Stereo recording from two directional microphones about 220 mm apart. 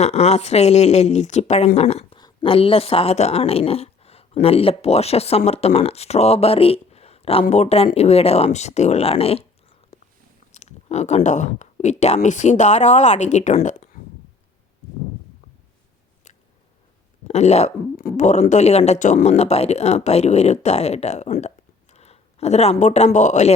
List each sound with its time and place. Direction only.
0.0 s speech: 30° left (ahead or behind)
10.5 s speech: 30° left (ahead or behind)
17.2 s speech: 30° left (ahead or behind)